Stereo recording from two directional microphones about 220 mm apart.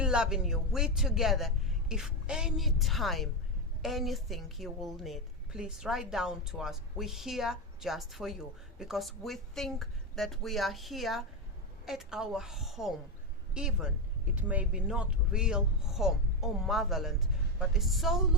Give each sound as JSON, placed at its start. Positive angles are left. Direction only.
{"t": 0.0, "sound": "a woman's voice", "side_deg": -5}